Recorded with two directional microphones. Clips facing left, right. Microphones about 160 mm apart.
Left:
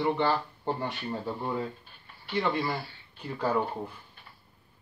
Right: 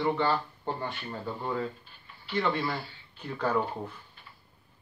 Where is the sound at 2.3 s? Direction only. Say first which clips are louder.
Even; 10° left (ahead or behind).